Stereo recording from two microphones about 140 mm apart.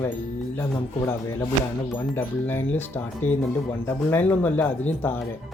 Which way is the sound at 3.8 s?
15° left (ahead or behind).